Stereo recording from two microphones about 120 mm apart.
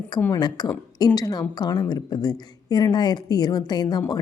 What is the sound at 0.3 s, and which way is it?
A woman's voice, 35° left (ahead or behind).